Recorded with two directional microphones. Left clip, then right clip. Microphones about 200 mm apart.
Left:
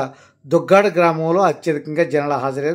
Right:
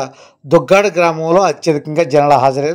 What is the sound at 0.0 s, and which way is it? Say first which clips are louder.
Speech: right 2 dB; 25° right (ahead or behind).